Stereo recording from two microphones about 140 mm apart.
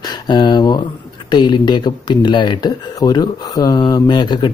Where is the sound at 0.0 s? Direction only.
30° left (ahead or behind).